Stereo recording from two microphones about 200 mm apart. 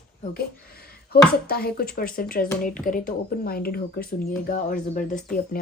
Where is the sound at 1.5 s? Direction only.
50° left (ahead or behind).